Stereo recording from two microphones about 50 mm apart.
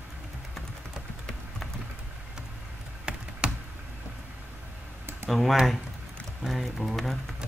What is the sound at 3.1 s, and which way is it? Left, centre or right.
Computer keyboard, centre.